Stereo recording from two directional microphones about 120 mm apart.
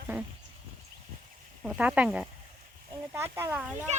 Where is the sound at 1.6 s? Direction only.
5° right (ahead or behind).